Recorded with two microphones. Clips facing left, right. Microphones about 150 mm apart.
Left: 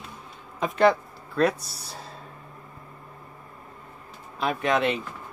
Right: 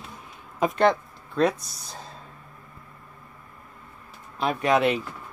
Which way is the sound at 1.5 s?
30° left (ahead or behind).